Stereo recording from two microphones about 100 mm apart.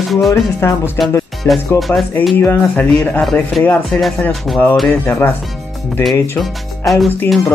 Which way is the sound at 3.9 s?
Centre (ahead or behind).